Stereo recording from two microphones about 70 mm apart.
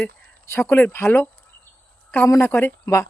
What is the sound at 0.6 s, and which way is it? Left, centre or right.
Speech, left.